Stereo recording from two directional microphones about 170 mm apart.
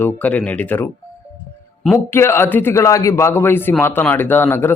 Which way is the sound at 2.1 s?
15° left (ahead or behind).